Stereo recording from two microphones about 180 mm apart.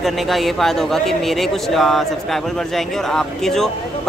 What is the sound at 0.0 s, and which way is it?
Speech, centre (ahead or behind).